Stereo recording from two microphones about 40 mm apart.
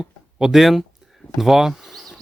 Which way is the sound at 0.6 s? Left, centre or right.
Centre.